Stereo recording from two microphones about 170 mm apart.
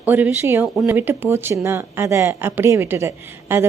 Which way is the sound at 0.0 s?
10° right (ahead or behind).